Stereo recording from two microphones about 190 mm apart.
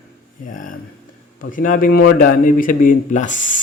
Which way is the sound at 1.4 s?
45° left (ahead or behind).